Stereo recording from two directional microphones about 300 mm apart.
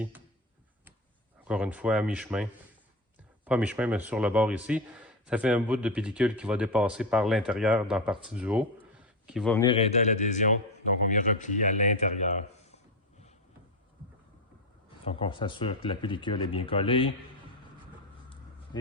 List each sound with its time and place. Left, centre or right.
1.5 s speech: centre
9.6 s a man's voice: centre
15.0 s speech: centre